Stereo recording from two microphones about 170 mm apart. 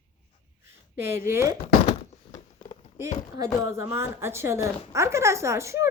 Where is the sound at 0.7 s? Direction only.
15° right (ahead or behind).